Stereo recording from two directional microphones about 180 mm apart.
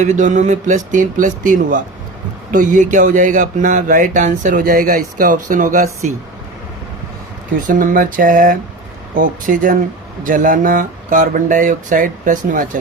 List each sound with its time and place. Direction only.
0.0 s speech: 40° right (ahead or behind)
7.7 s speech: 50° right (ahead or behind)